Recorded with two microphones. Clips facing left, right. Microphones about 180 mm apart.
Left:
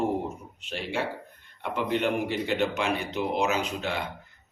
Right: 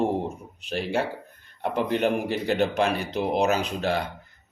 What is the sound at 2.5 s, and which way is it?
Speech, 40° right (ahead or behind).